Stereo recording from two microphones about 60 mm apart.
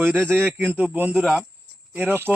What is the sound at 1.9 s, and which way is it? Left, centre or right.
Speech, right.